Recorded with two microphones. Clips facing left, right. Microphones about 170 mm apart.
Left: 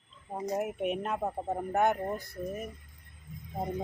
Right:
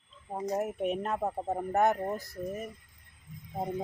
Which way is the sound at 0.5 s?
5° left (ahead or behind).